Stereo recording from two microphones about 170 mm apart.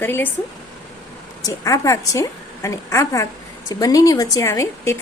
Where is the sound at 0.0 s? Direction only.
10° left (ahead or behind).